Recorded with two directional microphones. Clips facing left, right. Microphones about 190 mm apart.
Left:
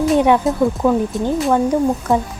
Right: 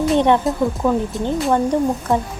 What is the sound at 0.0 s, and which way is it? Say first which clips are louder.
Speech: left 2 dB; 5° left (ahead or behind).